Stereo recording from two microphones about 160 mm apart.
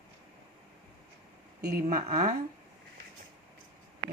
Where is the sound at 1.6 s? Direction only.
65° right (ahead or behind).